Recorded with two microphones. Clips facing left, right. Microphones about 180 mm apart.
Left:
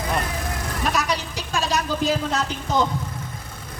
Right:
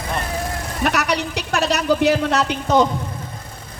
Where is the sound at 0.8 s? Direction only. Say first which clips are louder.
Right 4 dB; 70° right (ahead or behind).